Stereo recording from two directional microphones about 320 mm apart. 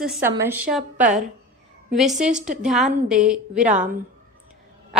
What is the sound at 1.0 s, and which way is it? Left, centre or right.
Speech, right.